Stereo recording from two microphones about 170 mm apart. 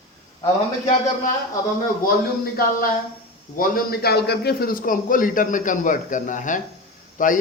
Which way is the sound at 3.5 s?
60° left (ahead or behind).